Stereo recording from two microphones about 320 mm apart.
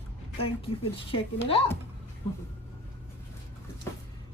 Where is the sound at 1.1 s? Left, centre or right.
Centre.